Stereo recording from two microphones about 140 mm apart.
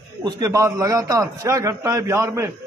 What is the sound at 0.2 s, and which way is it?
A man's voice, 25° right (ahead or behind).